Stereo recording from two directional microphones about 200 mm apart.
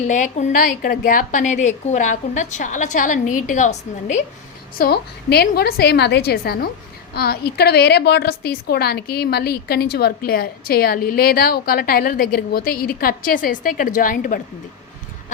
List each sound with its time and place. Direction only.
0.0 s a woman's voice: 35° left (ahead or behind)
4.8 s a woman's voice: 55° left (ahead or behind)